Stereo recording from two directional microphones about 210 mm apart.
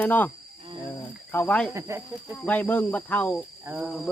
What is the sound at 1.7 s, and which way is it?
Speech, 15° right (ahead or behind).